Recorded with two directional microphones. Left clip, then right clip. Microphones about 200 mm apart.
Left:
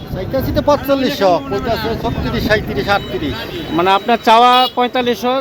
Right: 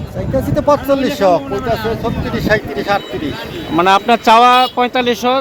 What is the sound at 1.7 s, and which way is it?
Speech, 40° right (ahead or behind).